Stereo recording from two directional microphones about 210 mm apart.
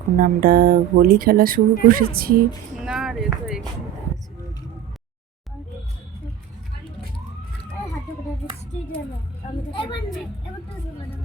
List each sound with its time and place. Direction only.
0.2 s speech: 45° right (ahead or behind)
2.7 s speech: centre (ahead or behind)
9.7 s a woman's voice: 25° left (ahead or behind)